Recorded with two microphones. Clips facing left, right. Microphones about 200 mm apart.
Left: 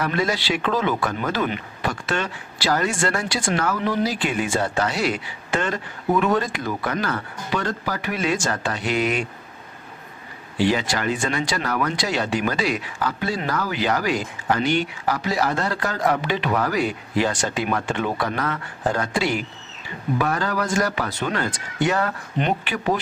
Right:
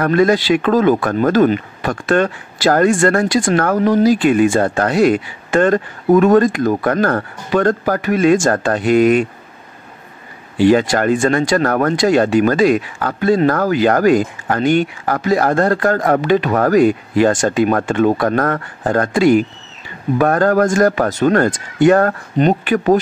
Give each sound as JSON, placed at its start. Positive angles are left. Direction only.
{"t": 0.0, "sound": "speech", "side_deg": -50}
{"t": 10.6, "sound": "speech", "side_deg": -50}